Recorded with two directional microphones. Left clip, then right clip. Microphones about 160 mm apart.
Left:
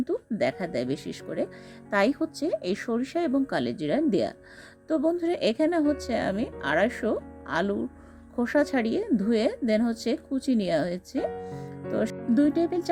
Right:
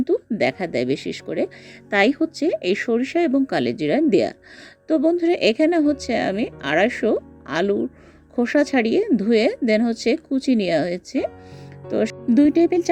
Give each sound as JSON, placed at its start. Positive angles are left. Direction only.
{"t": 0.0, "sound": "a woman's voice", "side_deg": -20}